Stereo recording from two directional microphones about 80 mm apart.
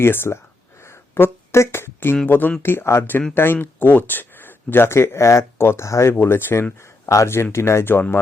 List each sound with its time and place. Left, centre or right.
0.0 s speech: left
0.9 s a sound: left
2.2 s speech: left